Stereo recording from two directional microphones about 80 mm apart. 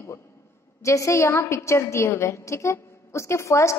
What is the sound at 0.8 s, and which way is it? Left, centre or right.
A woman's voice, left.